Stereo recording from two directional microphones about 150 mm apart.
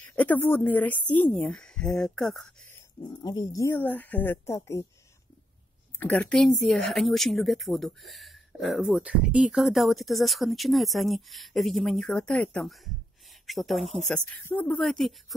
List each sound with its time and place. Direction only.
0.1 s a woman's voice: 10° left (ahead or behind)
3.2 s a woman's voice: 30° left (ahead or behind)
5.9 s a woman's voice: 10° left (ahead or behind)